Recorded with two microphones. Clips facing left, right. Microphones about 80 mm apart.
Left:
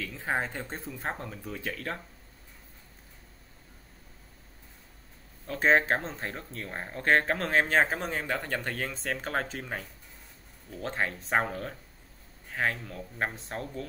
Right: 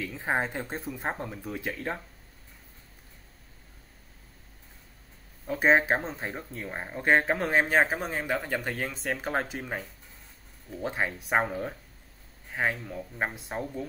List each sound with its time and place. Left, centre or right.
0.0 s speech: centre
5.5 s speech: centre